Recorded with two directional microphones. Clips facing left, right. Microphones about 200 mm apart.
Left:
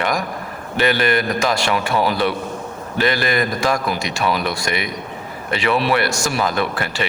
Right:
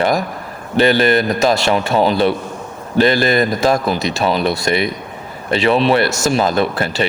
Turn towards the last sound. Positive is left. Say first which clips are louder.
# right 4 dB
turn(degrees=-30)  # may be behind; listen again after turning